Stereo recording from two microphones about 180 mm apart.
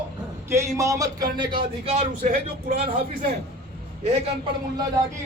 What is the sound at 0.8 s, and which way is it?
A man's voice, 20° right (ahead or behind).